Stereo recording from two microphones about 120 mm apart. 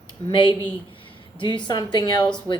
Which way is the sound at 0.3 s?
40° left (ahead or behind).